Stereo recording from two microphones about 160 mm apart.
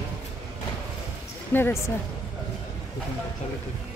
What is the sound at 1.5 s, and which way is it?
Speech, 15° left (ahead or behind).